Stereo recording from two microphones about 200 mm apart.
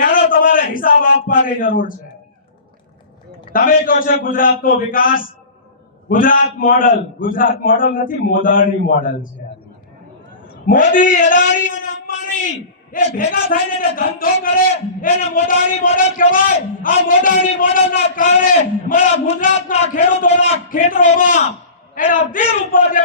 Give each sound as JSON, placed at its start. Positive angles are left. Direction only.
{"t": 0.0, "sound": "a sound", "side_deg": 45}
{"t": 3.5, "sound": "a man's voice", "side_deg": 45}
{"t": 10.5, "sound": "a man's voice", "side_deg": 40}